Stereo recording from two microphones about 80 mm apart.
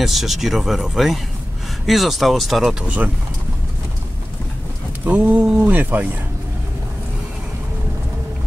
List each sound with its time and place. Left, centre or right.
0.0 s speech: centre
5.0 s speech: centre